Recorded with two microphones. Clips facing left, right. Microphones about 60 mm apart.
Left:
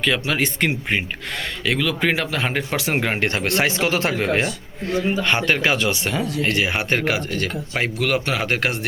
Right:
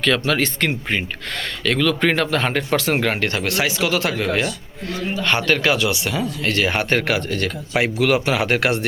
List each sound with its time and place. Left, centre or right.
0.0 s speech: centre
3.2 s speech: left
6.4 s a man's voice: centre